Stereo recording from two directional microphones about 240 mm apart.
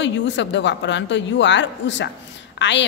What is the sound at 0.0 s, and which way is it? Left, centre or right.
A man's voice, left.